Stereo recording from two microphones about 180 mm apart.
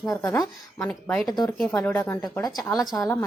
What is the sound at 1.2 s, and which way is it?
Speech, 20° left (ahead or behind).